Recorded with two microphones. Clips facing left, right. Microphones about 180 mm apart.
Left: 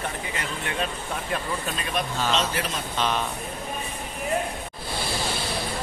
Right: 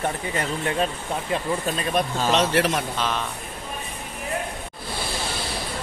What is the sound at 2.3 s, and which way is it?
Speech, 70° right (ahead or behind).